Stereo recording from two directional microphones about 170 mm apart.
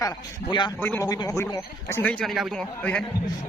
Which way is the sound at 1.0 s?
20° left (ahead or behind).